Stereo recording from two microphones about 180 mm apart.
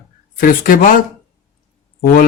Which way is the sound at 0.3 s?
50° left (ahead or behind).